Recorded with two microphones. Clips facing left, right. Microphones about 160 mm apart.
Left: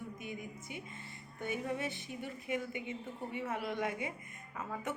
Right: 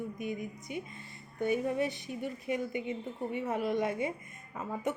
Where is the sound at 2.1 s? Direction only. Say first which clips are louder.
Right 5 dB; 25° right (ahead or behind).